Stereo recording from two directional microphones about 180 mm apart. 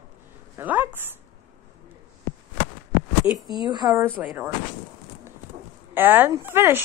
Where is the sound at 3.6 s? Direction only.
25° right (ahead or behind).